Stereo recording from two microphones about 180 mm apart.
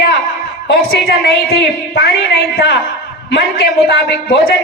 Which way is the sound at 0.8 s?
60° left (ahead or behind).